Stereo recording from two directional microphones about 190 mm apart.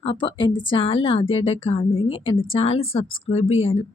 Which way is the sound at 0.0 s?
25° left (ahead or behind).